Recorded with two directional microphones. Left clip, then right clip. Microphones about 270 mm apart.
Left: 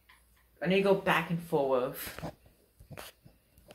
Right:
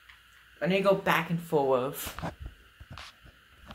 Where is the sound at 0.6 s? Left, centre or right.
Right.